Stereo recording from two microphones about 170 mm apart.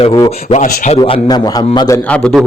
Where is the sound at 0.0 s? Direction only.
30° left (ahead or behind).